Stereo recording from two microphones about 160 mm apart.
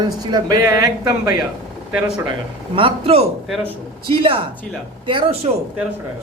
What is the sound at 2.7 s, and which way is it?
Speech, 35° right (ahead or behind).